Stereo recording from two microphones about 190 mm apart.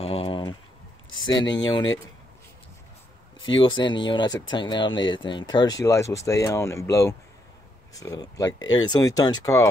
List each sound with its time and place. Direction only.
0.0 s a sound: 30° left (ahead or behind)
1.4 s speech: 75° left (ahead or behind)
1.7 s speech: 20° left (ahead or behind)
3.4 s speech: 90° left
3.7 s speech: 25° left (ahead or behind)